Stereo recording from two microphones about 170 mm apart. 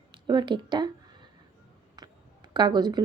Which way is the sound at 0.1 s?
25° right (ahead or behind).